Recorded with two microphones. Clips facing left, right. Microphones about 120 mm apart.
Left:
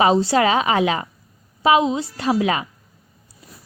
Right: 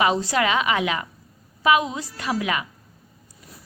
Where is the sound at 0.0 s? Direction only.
30° left (ahead or behind).